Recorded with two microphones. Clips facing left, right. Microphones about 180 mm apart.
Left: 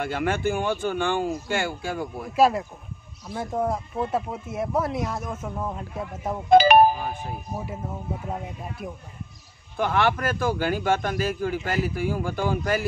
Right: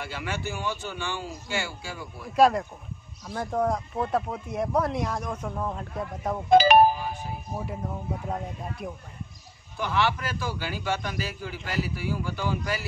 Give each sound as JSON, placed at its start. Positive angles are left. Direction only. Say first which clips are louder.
{"t": 0.0, "sound": "speech", "louder": "left 8 dB", "side_deg": 50}
{"t": 2.3, "sound": "speech", "louder": "even", "side_deg": 5}
{"t": 6.5, "sound": "music", "louder": "left 2 dB", "side_deg": 55}
{"t": 8.3, "sound": "speech", "louder": "even", "side_deg": 0}
{"t": 9.8, "sound": "speech", "louder": "left 4 dB", "side_deg": 50}